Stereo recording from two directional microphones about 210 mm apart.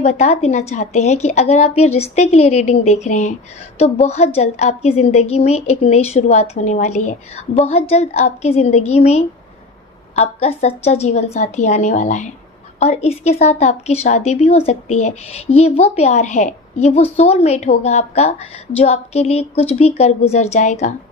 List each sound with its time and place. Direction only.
0.0 s a woman's voice: 30° left (ahead or behind)